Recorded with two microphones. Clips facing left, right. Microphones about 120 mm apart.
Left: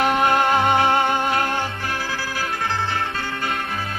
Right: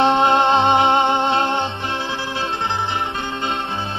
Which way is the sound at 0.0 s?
25° right (ahead or behind).